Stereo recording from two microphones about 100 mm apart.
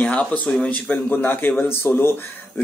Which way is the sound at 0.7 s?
15° left (ahead or behind).